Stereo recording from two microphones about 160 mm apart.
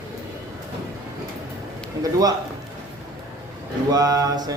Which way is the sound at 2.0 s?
25° right (ahead or behind).